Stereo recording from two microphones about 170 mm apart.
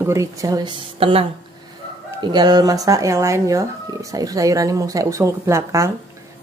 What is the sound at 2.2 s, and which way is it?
Speech, 25° right (ahead or behind).